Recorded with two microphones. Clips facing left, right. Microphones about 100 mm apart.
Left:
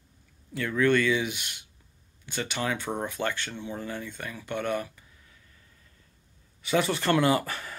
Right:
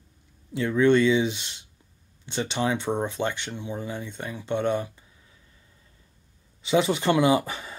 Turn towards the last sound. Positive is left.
turn(degrees=-20)  # may be behind; listen again after turning